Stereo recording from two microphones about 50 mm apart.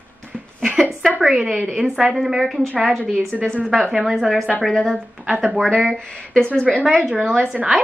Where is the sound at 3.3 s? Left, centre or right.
Centre.